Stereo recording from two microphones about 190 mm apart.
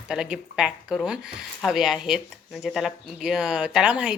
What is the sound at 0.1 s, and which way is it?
Speech, 5° right (ahead or behind).